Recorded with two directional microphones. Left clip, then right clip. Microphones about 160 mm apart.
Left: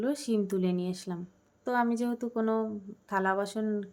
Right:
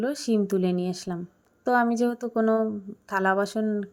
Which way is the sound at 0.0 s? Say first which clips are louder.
Right 4 dB; 30° right (ahead or behind).